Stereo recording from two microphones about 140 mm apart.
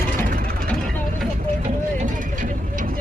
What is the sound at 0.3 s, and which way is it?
Vehicle, 90° right.